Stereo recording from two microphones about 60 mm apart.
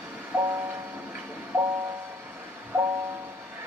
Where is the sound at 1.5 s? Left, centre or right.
Right.